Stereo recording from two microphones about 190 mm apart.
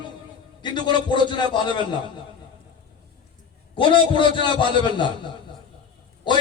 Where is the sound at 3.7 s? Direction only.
25° left (ahead or behind).